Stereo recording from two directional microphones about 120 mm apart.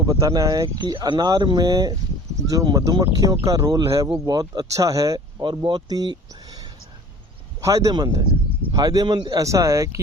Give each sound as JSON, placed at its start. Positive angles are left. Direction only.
{"t": 0.0, "sound": "speech", "side_deg": -30}
{"t": 9.4, "sound": "speech", "side_deg": -25}